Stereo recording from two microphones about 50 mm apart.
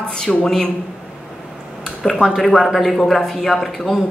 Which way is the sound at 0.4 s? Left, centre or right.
Centre.